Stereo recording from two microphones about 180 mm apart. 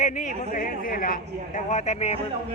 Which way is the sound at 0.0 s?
40° left (ahead or behind).